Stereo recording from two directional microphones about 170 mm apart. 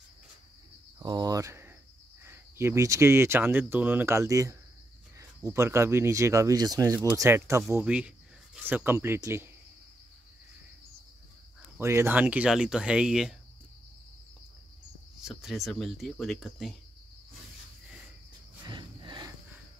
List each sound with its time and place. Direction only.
0.9 s cricket: 25° right (ahead or behind)
2.2 s speech: 15° right (ahead or behind)
11.8 s speech: 15° right (ahead or behind)
15.2 s speech: centre (ahead or behind)
18.6 s a sound: 25° right (ahead or behind)